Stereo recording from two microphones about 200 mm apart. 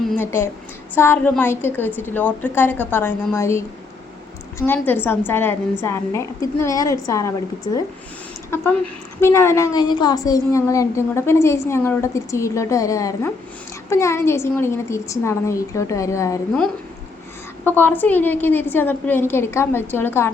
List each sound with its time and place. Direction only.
0.1 s a woman's voice: 10° left (ahead or behind)
17.7 s a woman's voice: 10° left (ahead or behind)